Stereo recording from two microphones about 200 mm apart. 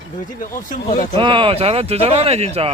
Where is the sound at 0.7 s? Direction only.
40° left (ahead or behind).